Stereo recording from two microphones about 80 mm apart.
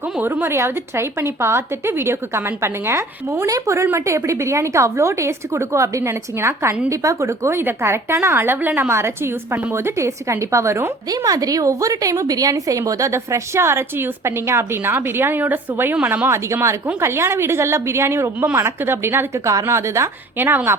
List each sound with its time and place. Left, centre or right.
0.2 s a woman's voice: right
8.9 s a woman's voice: right
11.1 s a woman's voice: right